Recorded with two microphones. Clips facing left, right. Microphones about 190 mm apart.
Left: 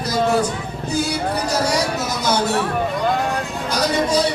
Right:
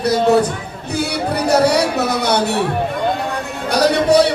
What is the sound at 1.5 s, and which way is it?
Speech, 60° right (ahead or behind).